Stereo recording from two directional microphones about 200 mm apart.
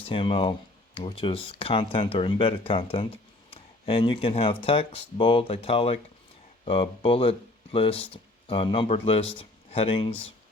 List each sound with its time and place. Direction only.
0.0 s speech: 25° left (ahead or behind)